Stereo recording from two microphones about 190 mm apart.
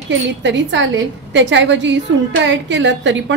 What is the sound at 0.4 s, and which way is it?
A woman's voice, 70° right (ahead or behind).